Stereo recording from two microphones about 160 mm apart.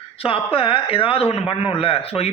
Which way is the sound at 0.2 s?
35° left (ahead or behind).